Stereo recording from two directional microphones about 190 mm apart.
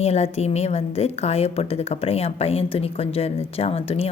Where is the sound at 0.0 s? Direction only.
35° left (ahead or behind).